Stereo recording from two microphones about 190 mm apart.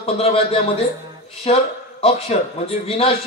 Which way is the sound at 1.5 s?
30° left (ahead or behind).